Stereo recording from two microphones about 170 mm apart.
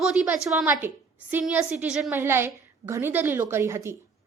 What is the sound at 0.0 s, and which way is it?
A woman's voice, 5° right (ahead or behind).